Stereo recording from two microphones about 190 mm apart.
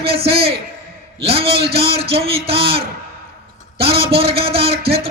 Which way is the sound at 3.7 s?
30° right (ahead or behind).